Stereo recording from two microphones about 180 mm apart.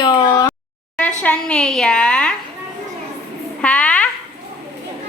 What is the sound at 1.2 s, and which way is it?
A woman's voice, 5° left (ahead or behind).